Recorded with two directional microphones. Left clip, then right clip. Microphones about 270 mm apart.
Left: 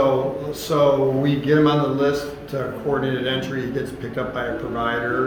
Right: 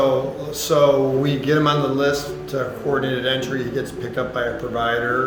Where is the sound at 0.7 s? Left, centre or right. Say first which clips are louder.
Right 2 dB; right.